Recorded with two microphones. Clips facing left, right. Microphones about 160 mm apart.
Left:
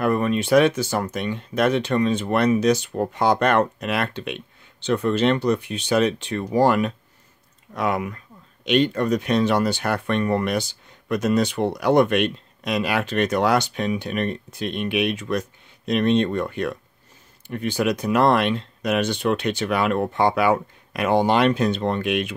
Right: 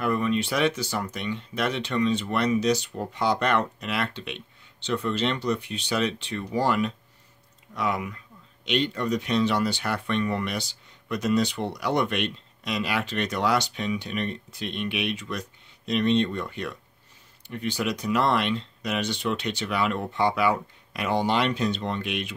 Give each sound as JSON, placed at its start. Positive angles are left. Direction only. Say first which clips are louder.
{"t": 0.0, "sound": "speech", "louder": "left 4 dB", "side_deg": 50}